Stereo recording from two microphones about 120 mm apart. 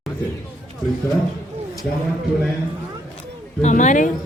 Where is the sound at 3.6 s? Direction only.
85° left.